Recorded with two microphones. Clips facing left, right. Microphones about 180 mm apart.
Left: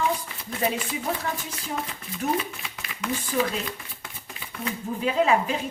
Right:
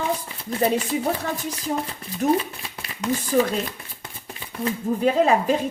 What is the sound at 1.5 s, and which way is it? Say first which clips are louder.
Speech: right 6 dB; 35° right (ahead or behind).